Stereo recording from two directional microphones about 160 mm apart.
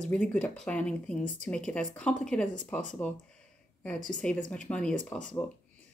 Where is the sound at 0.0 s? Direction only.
5° left (ahead or behind).